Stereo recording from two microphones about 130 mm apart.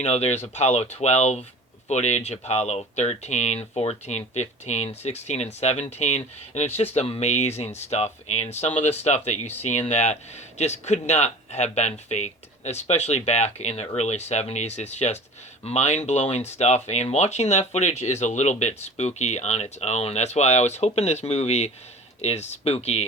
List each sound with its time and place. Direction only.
0.0 s speech: 55° left (ahead or behind)